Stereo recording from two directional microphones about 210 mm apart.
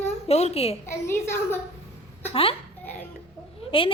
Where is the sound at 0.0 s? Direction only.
30° left (ahead or behind).